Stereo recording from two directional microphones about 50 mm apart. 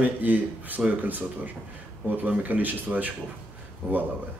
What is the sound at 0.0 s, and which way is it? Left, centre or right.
A man's voice, right.